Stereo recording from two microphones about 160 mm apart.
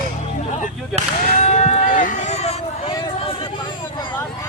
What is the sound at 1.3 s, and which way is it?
Run, 45° left (ahead or behind).